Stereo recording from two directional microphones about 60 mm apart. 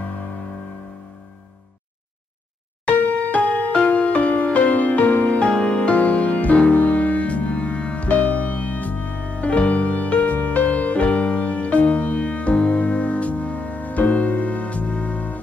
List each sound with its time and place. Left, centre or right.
2.8 s music: left